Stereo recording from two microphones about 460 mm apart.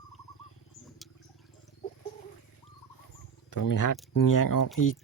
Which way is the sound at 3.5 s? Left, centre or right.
Left.